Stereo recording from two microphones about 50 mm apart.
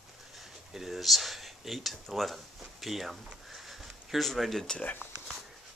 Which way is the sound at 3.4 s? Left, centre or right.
Centre.